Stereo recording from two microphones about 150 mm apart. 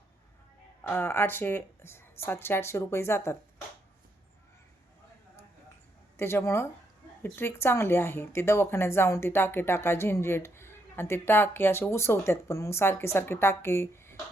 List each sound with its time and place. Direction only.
0.9 s speech: 15° left (ahead or behind)
6.1 s speech: 15° left (ahead or behind)